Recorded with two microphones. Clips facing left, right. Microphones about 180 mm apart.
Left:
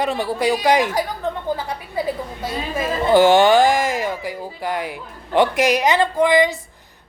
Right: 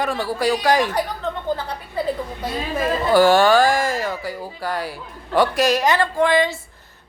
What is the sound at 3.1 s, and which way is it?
Speech, 20° left (ahead or behind).